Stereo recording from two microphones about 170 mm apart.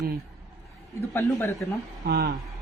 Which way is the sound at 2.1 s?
65° right (ahead or behind).